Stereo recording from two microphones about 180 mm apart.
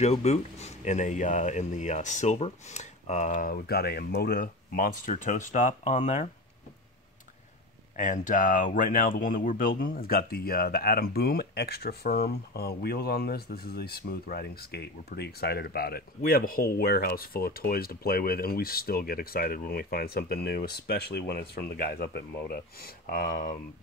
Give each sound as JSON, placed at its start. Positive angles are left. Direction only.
{"t": 0.0, "sound": "speech", "side_deg": 40}
{"t": 7.9, "sound": "speech", "side_deg": 45}